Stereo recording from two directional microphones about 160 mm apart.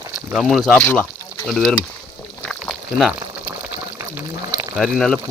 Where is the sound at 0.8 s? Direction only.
15° left (ahead or behind).